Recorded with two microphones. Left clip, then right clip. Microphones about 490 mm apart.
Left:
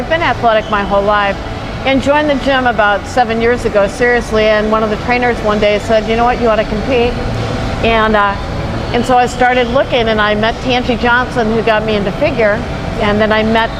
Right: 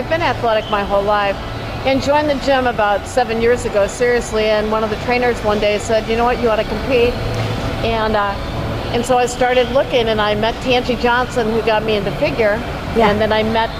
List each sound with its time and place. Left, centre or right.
0.1 s speech: centre